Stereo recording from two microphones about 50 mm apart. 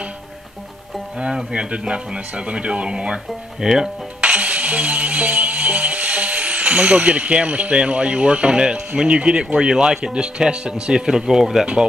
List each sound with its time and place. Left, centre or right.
1.1 s speech: centre
3.6 s speech: centre
4.2 s music: right; by 11.6 s centre